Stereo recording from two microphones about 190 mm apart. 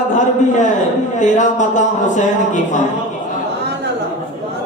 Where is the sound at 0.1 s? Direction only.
40° left (ahead or behind).